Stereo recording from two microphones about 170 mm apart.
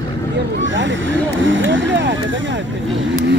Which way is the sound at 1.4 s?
90° right.